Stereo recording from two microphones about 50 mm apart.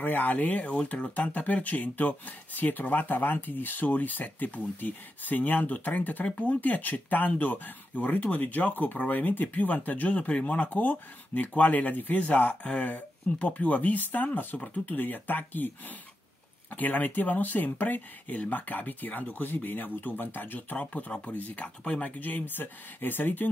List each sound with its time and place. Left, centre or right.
0.0 s speech: left
16.7 s speech: left